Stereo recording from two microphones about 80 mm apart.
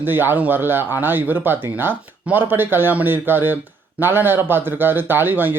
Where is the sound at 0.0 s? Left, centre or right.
Right.